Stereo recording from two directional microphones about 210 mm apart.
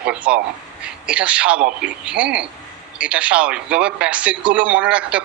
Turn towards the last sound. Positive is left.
turn(degrees=-5)  # may be behind; listen again after turning